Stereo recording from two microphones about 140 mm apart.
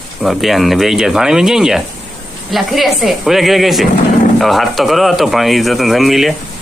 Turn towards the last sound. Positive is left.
turn(degrees=0)  # may be behind; listen again after turning